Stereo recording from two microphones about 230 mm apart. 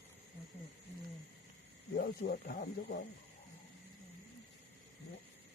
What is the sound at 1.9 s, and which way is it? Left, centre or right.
Speech, left.